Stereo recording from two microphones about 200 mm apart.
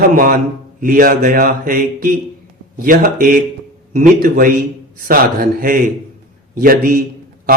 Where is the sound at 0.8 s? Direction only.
45° right (ahead or behind).